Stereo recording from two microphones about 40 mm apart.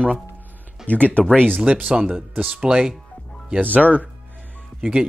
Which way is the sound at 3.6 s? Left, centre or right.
Right.